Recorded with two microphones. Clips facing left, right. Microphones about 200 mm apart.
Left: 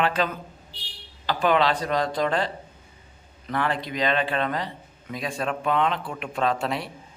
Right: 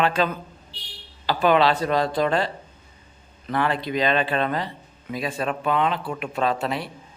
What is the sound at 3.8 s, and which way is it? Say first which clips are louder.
Speech: right 3 dB; 25° right (ahead or behind).